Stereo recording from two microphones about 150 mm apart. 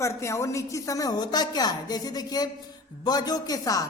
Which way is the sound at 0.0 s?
20° left (ahead or behind).